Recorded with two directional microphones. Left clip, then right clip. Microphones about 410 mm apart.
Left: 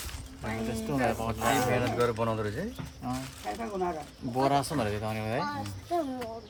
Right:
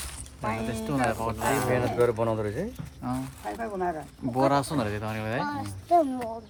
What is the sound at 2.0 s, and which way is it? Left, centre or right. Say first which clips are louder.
Speech: right 4 dB; centre.